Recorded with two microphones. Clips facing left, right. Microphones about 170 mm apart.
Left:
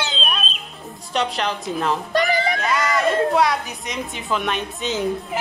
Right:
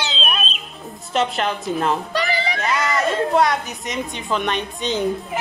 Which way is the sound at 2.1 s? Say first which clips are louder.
Left 3 dB; 50° left (ahead or behind).